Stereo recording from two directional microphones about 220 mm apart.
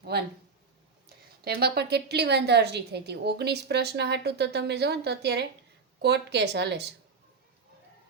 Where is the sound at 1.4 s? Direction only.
45° right (ahead or behind).